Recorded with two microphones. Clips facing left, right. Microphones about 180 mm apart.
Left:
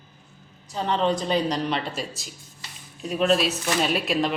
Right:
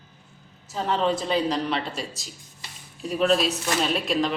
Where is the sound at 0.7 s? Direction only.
5° right (ahead or behind).